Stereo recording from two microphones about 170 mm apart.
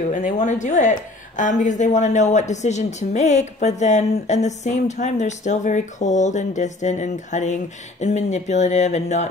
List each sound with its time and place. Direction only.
0.1 s a woman's voice: 45° left (ahead or behind)